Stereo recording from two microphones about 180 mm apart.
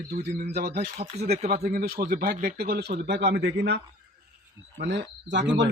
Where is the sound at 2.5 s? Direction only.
60° right (ahead or behind).